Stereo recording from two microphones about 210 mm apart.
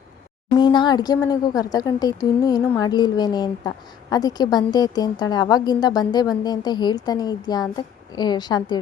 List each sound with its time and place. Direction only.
0.6 s a woman's voice: 20° left (ahead or behind)